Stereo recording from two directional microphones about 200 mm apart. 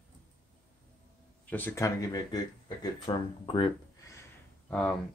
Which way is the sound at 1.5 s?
10° left (ahead or behind).